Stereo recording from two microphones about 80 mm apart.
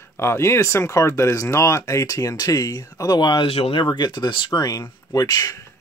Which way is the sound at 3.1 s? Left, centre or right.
Left.